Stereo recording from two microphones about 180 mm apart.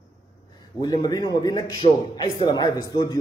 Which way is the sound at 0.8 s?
20° left (ahead or behind).